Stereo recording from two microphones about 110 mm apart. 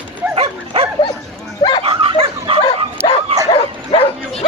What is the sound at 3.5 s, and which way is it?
Bow-wow, 60° left (ahead or behind).